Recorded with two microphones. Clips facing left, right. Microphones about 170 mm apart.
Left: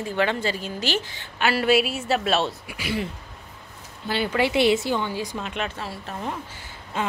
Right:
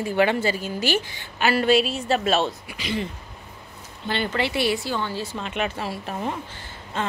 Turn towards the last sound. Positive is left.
turn(degrees=10)  # may be behind; listen again after turning